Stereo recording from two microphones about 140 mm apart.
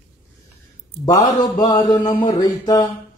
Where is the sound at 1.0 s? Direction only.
25° left (ahead or behind).